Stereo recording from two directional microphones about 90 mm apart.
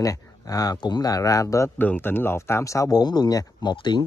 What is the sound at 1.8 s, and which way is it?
Speech, 20° left (ahead or behind).